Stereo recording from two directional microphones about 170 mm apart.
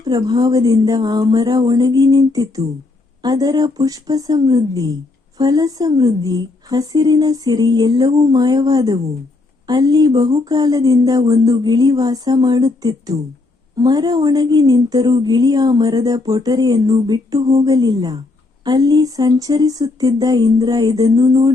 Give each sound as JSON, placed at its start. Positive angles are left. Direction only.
{"t": 0.3, "sound": "a woman's voice", "side_deg": -25}